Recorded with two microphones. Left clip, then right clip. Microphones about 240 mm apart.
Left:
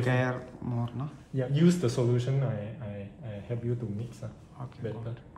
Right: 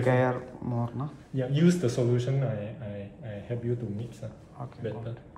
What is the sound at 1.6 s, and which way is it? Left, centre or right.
Speech, centre.